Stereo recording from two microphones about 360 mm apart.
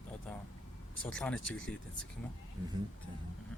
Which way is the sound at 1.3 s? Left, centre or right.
Left.